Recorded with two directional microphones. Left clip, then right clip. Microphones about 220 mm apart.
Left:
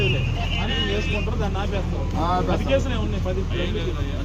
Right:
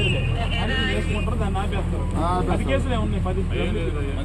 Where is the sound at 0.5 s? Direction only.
25° right (ahead or behind).